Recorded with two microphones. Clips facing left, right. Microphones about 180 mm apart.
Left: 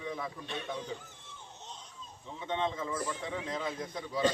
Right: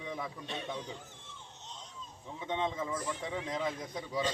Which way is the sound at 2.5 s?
15° right (ahead or behind).